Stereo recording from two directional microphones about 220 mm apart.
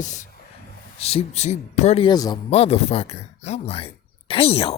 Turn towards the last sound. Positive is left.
turn(degrees=25)  # may be behind; listen again after turning